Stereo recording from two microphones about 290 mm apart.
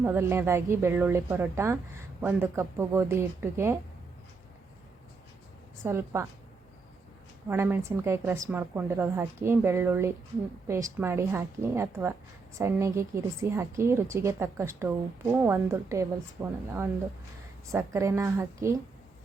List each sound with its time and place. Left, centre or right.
0.0 s a woman's voice: centre
5.8 s a woman's voice: centre
7.4 s a woman's voice: centre